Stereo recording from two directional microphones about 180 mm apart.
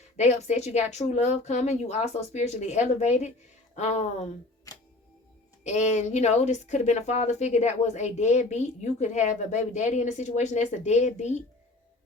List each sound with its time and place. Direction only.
0.2 s speech: 40° left (ahead or behind)
4.7 s music: 20° left (ahead or behind)
5.6 s speech: 40° left (ahead or behind)